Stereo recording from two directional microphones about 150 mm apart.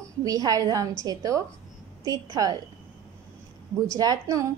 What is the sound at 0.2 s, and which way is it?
A woman's voice, 25° right (ahead or behind).